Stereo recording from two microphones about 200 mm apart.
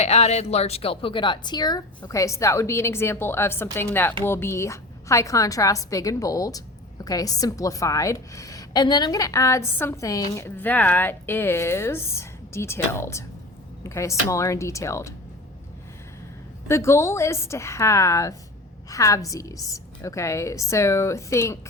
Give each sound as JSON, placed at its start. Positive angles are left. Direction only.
{"t": 0.0, "sound": "a woman's voice", "side_deg": 35}
{"t": 16.6, "sound": "a woman's voice", "side_deg": 15}